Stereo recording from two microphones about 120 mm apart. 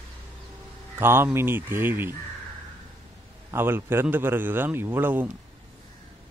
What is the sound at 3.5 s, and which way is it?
A man's voice, 20° right (ahead or behind).